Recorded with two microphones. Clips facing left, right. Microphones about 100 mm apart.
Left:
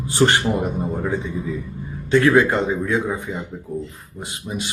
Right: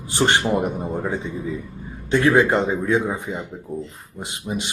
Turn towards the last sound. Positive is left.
turn(degrees=-25)  # may be behind; listen again after turning